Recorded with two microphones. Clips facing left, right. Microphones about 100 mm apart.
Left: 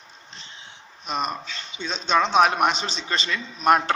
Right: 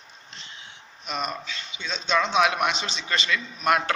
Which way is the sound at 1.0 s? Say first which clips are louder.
Left 3 dB; 40° left (ahead or behind).